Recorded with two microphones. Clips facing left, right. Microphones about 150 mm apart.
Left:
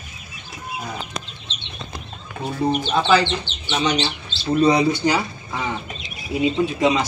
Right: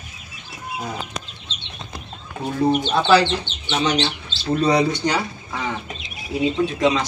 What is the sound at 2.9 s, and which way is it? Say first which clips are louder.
Speech: even; 5° right (ahead or behind).